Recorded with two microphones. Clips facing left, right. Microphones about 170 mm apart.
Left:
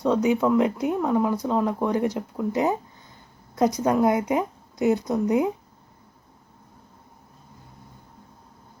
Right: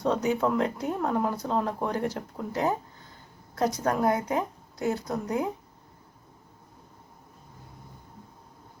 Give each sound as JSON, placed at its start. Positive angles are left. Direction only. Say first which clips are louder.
{"t": 0.2, "sound": "speech", "louder": "left 5 dB", "side_deg": 15}
{"t": 1.9, "sound": "a woman's voice", "louder": "left 6 dB", "side_deg": 15}